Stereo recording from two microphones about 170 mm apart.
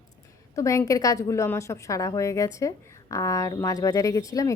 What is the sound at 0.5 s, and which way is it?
A woman's voice, 20° left (ahead or behind).